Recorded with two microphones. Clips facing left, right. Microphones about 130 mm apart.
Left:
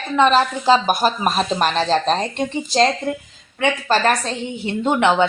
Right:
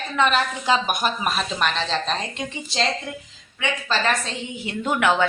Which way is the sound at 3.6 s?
50° left (ahead or behind).